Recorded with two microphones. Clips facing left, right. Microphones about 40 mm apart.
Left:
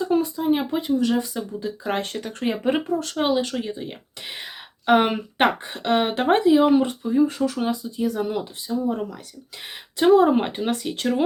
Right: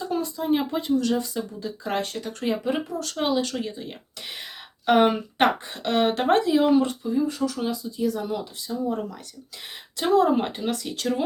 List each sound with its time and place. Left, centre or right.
0.1 s speech: centre; by 3.2 s left
3.2 s speech: left
7.3 s speech: left
8.7 s speech: centre
10.0 s speech: left